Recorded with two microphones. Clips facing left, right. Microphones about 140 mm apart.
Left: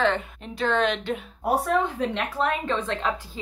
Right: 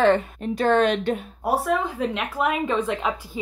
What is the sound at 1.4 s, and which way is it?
Speech, 5° right (ahead or behind).